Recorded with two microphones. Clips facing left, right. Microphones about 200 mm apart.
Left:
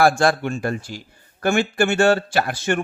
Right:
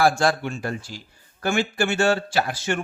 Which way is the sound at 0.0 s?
55° left (ahead or behind).